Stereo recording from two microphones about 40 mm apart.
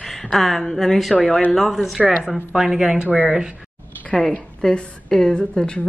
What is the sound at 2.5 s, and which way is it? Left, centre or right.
Speech, centre.